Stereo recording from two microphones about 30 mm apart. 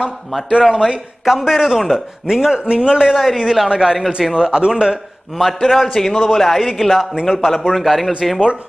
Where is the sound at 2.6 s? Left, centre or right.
Right.